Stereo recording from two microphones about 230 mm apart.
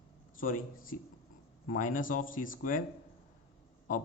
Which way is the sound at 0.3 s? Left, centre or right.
Left.